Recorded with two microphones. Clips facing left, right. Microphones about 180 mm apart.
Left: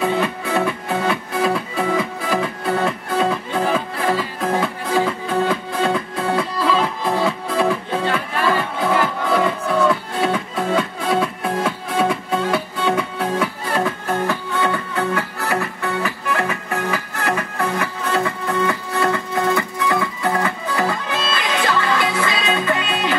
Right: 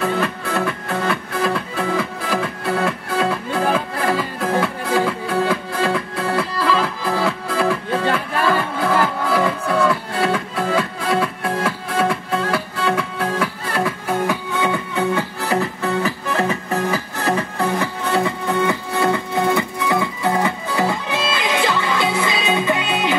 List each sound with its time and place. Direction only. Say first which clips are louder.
0.0 s music: left 1 dB; 5° left (ahead or behind); by 15.7 s 20° right (ahead or behind)
15.8 s music: right 2 dB; 35° right (ahead or behind)